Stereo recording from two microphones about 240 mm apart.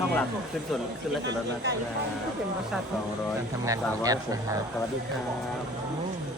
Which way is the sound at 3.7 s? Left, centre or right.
Centre.